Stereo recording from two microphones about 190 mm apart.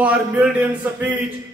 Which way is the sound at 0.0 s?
10° right (ahead or behind).